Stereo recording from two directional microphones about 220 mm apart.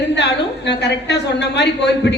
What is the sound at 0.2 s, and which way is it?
A woman's voice, 50° left (ahead or behind).